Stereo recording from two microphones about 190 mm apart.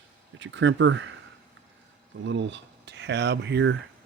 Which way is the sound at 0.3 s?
70° right (ahead or behind).